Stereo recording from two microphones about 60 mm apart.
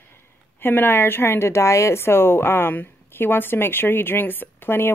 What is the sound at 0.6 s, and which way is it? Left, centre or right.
A woman's voice, left.